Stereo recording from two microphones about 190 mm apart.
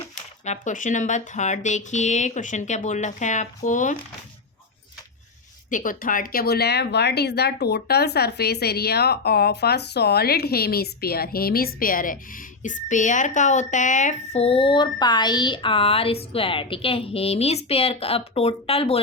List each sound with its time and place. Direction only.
0.4 s a woman's voice: 40° left (ahead or behind)
5.7 s a woman's voice: 45° left (ahead or behind); by 18.9 s 30° left (ahead or behind)